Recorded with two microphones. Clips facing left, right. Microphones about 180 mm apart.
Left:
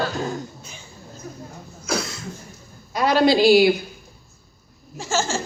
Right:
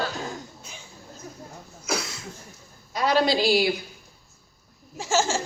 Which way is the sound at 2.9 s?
65° left (ahead or behind).